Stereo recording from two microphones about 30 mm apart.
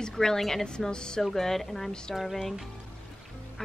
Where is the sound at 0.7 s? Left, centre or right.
Left.